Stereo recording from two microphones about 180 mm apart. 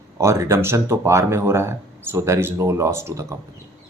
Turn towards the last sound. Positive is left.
turn(degrees=-15)  # may be behind; listen again after turning